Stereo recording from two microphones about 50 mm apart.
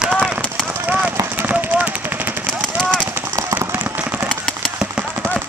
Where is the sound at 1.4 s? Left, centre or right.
Right.